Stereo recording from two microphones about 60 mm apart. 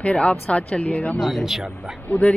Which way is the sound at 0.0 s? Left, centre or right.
Centre.